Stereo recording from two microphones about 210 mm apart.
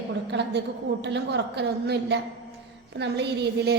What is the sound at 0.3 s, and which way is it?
A woman's voice, 55° right (ahead or behind).